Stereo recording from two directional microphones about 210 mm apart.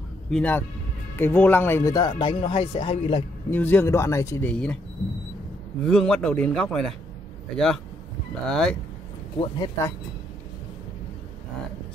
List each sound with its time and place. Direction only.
0.3 s speech: 5° left (ahead or behind); by 3.3 s 25° left (ahead or behind)
3.4 s speech: 10° left (ahead or behind)
5.9 s a man's voice: 5° left (ahead or behind)
9.4 s speech: 20° left (ahead or behind)